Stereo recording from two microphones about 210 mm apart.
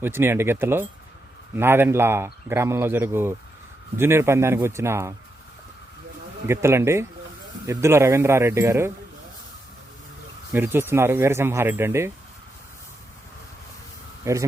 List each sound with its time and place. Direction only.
0.0 s speech: 10° right (ahead or behind)
6.5 s speech: 10° right (ahead or behind)
10.5 s speech: 10° right (ahead or behind)
14.3 s speech: 15° right (ahead or behind)